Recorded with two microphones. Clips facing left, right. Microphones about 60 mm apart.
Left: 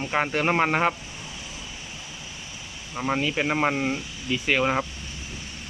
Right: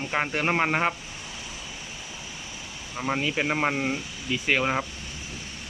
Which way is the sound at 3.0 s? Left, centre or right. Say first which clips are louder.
Left 2 dB; centre.